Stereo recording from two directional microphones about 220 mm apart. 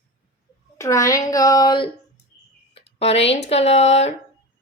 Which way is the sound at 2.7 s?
30° left (ahead or behind).